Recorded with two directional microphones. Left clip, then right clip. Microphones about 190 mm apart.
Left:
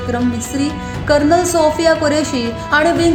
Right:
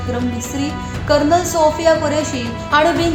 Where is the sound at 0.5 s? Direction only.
20° left (ahead or behind).